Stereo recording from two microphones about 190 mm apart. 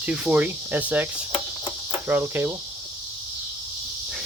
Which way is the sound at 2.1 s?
10° right (ahead or behind).